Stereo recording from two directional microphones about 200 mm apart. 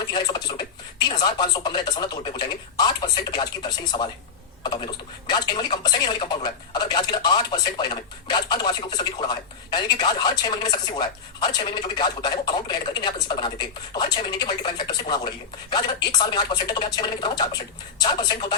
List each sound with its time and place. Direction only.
0.1 s speech: 20° left (ahead or behind)